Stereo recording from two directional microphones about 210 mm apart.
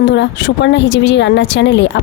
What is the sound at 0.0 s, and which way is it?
A woman's voice, 55° left (ahead or behind).